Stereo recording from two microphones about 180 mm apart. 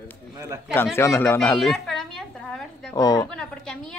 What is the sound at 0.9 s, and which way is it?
Speech, 15° left (ahead or behind).